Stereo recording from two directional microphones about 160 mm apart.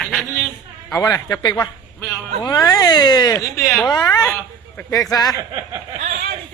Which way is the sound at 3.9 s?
20° left (ahead or behind).